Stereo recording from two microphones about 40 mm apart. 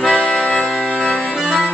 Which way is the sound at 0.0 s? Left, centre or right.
Left.